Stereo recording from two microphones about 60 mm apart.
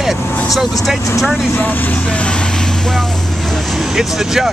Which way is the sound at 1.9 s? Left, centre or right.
Centre.